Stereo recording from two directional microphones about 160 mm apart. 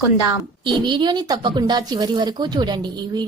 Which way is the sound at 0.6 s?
30° right (ahead or behind).